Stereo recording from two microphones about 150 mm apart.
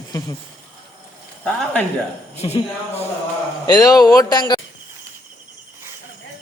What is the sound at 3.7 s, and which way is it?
Speech, 25° left (ahead or behind).